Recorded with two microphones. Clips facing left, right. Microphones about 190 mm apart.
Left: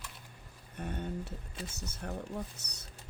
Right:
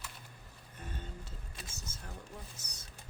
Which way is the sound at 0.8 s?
65° left (ahead or behind).